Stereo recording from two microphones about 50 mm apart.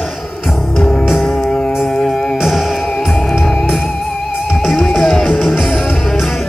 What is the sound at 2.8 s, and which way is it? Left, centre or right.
Music, centre.